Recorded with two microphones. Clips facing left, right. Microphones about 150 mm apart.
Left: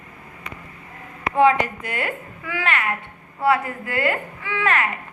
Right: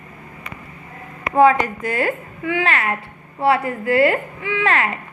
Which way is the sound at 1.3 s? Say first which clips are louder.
Right 3 dB; 45° right (ahead or behind).